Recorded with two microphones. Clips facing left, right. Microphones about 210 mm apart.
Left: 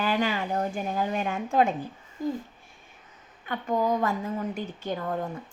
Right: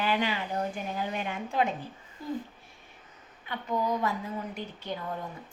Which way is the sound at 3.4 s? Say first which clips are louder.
Left 4 dB; 50° left (ahead or behind).